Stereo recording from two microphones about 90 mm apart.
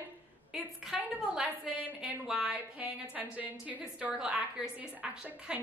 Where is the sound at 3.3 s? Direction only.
15° right (ahead or behind).